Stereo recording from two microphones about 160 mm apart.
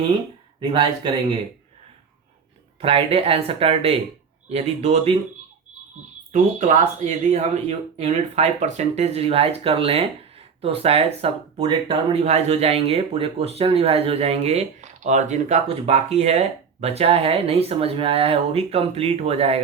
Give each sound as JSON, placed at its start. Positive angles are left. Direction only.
{"t": 0.6, "sound": "speech", "side_deg": -35}
{"t": 2.8, "sound": "speech", "side_deg": -40}
{"t": 6.3, "sound": "speech", "side_deg": -50}